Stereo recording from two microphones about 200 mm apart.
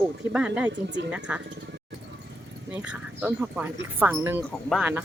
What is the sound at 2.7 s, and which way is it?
Speech, 5° right (ahead or behind).